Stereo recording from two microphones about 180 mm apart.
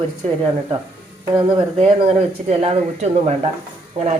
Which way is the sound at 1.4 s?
30° right (ahead or behind).